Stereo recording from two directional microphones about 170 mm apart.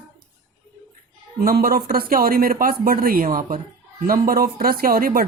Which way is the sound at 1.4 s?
60° right (ahead or behind).